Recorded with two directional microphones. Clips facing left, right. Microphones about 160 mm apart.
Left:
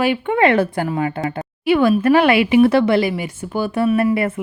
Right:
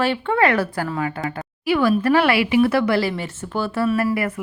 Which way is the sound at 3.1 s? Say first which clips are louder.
Left 3 dB; 10° left (ahead or behind).